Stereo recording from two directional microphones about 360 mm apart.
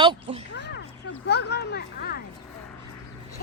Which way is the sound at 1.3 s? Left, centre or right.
Left.